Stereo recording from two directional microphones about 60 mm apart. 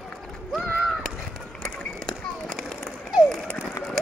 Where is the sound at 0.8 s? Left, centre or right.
Centre.